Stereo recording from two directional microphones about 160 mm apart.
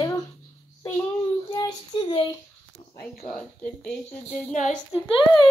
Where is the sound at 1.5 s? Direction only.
25° left (ahead or behind).